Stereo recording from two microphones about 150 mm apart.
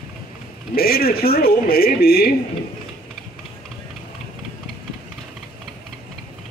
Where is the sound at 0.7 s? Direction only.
90° left.